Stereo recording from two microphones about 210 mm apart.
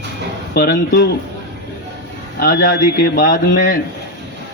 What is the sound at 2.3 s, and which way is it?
A man's voice, 45° left (ahead or behind).